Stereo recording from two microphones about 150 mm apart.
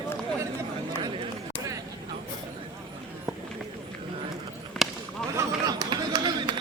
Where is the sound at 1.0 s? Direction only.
30° right (ahead or behind).